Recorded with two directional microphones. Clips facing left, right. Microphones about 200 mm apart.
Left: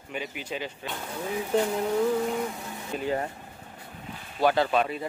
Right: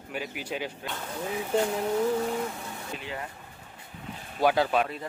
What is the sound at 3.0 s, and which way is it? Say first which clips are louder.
Speech: left 13 dB; 40° left (ahead or behind).